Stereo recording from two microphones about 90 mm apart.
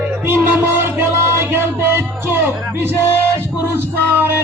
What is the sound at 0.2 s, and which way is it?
Music, 20° right (ahead or behind).